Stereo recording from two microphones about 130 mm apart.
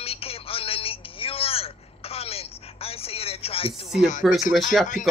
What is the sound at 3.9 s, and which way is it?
Speech, 65° left (ahead or behind).